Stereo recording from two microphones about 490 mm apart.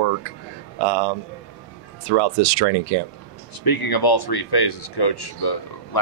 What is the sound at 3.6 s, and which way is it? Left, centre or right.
Speech, left.